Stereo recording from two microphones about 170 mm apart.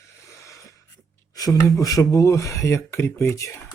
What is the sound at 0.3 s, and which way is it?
Wheeze, 20° left (ahead or behind).